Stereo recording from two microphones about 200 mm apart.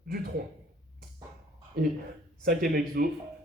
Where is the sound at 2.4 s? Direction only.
45° right (ahead or behind).